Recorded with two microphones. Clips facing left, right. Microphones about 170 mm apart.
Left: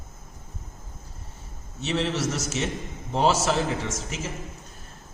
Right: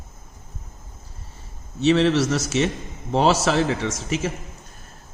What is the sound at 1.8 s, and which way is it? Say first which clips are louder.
A man's voice: right 9 dB; 75° right (ahead or behind).